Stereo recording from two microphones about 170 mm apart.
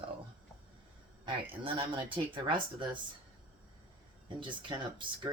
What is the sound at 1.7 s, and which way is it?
Speech, 30° right (ahead or behind).